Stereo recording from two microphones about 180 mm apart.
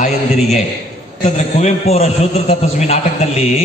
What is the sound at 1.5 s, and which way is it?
A man's voice, 35° left (ahead or behind).